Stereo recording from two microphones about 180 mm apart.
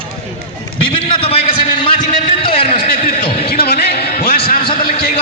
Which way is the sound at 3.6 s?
60° left (ahead or behind).